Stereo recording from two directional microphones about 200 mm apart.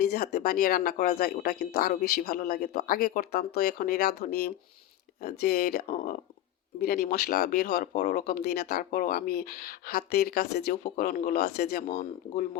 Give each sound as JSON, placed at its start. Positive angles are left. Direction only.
{"t": 0.0, "sound": "speech", "side_deg": 50}